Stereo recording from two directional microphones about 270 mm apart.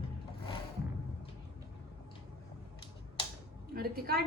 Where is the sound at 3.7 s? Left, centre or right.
Right.